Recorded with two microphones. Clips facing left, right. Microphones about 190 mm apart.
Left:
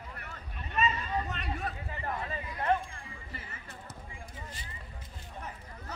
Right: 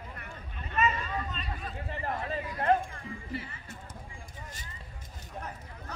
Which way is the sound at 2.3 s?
40° right (ahead or behind).